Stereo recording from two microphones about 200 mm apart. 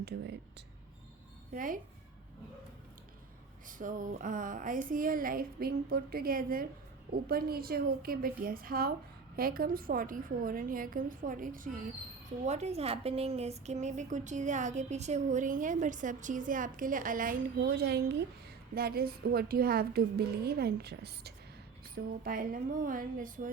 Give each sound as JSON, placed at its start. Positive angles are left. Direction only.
{"t": 1.5, "sound": "a woman's voice", "side_deg": -40}
{"t": 3.7, "sound": "a woman's voice", "side_deg": -40}